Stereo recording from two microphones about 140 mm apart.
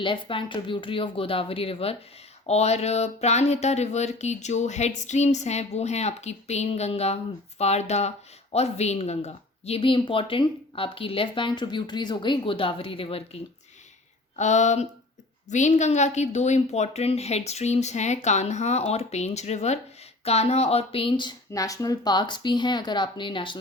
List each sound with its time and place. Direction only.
0.0 s speech: 35° left (ahead or behind)
2.5 s a sound: 50° left (ahead or behind)
8.5 s speech: 50° left (ahead or behind)
14.3 s speech: 55° left (ahead or behind)
15.4 s a sound: 60° left (ahead or behind)
20.2 s speech: 50° left (ahead or behind)